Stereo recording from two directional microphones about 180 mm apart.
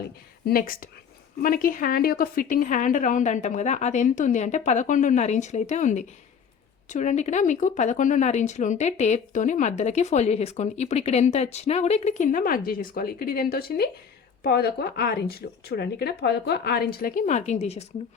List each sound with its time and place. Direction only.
0.4 s a woman's voice: 55° left (ahead or behind); by 17.8 s 35° left (ahead or behind)